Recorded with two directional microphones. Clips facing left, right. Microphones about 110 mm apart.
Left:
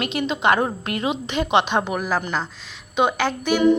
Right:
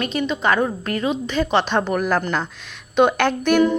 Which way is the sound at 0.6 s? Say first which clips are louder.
Right 2 dB; 30° left (ahead or behind).